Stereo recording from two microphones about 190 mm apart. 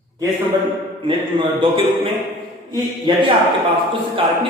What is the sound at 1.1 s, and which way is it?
A man's voice, 25° right (ahead or behind).